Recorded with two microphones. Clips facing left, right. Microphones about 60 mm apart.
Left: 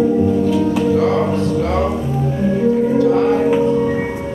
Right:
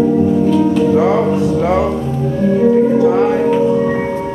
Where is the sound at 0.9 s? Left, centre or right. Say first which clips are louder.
Right 3 dB; centre.